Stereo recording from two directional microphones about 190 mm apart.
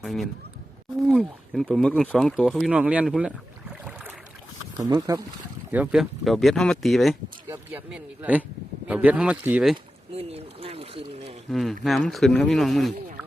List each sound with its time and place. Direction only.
0.0 s speech: centre (ahead or behind)
4.9 s speech: 20° right (ahead or behind)
5.7 s speech: 5° right (ahead or behind)
7.4 s speech: 10° right (ahead or behind)
10.1 s boat: 30° right (ahead or behind)
11.5 s speech: centre (ahead or behind)